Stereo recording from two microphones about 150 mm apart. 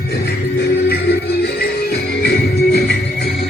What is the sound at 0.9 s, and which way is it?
Music, 90° left.